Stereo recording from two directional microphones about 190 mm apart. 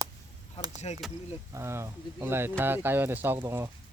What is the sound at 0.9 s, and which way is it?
Speech, 30° left (ahead or behind).